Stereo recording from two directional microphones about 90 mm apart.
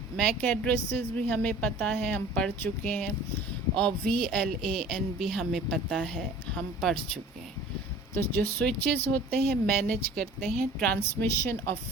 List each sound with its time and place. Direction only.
0.2 s speech: 15° left (ahead or behind)
8.1 s speech: 20° left (ahead or behind)
11.2 s a woman's voice: 25° left (ahead or behind)